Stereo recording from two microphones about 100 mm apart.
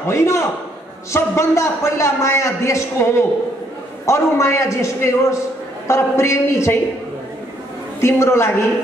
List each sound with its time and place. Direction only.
0.0 s a man's voice: 30° left (ahead or behind)
8.0 s a man's voice: 25° left (ahead or behind)